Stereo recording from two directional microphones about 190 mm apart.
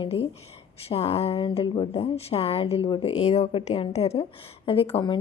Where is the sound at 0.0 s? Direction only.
30° left (ahead or behind).